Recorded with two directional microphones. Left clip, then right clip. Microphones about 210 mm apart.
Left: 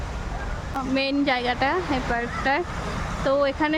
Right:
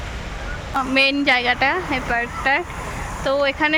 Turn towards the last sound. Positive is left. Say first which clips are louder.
# right 3 dB
turn(degrees=15)  # may be behind; listen again after turning